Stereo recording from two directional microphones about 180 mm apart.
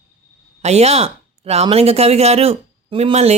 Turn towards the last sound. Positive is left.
turn(degrees=-35)  # may be behind; listen again after turning